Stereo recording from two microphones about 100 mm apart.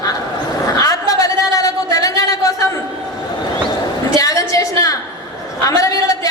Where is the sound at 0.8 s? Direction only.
35° left (ahead or behind).